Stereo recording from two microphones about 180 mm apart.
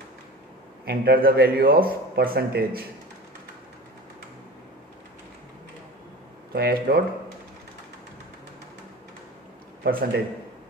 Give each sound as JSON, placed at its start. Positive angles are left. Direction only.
{"t": 0.8, "sound": "a man's voice", "side_deg": -55}
{"t": 6.5, "sound": "a man's voice", "side_deg": -55}
{"t": 9.8, "sound": "a man's voice", "side_deg": -55}